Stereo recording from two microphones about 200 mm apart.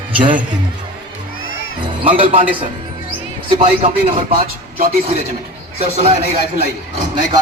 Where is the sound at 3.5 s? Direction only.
35° right (ahead or behind).